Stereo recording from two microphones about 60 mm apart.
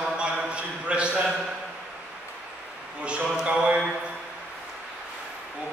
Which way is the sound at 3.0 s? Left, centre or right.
Centre.